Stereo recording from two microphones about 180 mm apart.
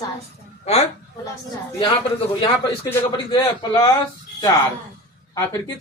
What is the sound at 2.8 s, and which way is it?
A man's voice, 20° left (ahead or behind).